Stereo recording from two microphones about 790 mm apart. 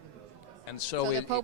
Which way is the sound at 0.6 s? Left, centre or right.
Left.